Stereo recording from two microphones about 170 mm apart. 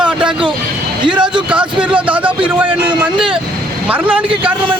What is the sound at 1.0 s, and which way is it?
Speech, 30° right (ahead or behind).